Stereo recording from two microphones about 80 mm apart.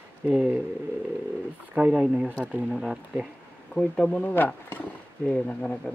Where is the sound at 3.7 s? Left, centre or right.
Centre.